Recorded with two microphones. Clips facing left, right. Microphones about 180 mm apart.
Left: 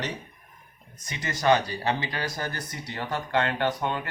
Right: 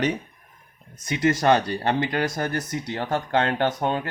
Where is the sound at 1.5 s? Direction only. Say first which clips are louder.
Right 3 dB; 60° right (ahead or behind); by 4.0 s 45° right (ahead or behind).